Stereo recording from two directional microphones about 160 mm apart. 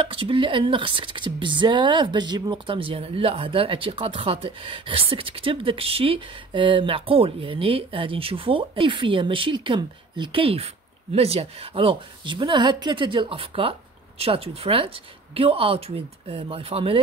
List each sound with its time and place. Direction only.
0.0 s speech: 35° right (ahead or behind)